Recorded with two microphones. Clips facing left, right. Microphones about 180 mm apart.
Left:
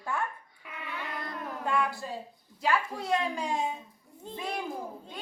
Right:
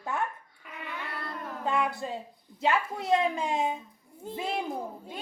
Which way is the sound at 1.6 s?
20° right (ahead or behind).